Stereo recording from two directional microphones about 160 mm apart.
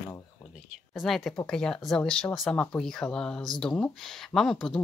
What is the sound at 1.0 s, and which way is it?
Speech, centre (ahead or behind).